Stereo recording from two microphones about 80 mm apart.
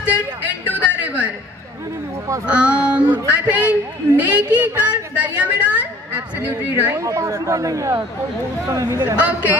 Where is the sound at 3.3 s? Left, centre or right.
Centre.